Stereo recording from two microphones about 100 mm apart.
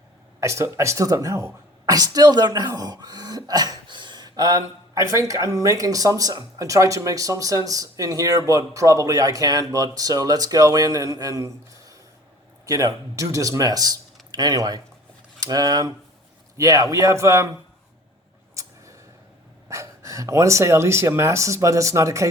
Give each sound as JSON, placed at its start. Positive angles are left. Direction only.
{"t": 0.3, "sound": "speech", "side_deg": -30}
{"t": 18.6, "sound": "a sound", "side_deg": -30}
{"t": 19.6, "sound": "speech", "side_deg": -30}